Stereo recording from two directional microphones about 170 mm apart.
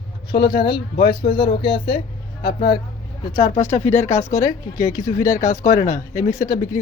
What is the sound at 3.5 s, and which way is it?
A woman's voice, 45° left (ahead or behind).